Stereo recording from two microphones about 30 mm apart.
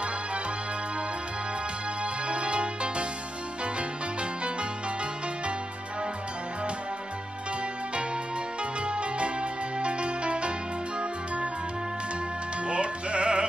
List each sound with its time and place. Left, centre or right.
2.2 s music: right
4.2 s music: right
8.8 s music: right
12.6 s music: right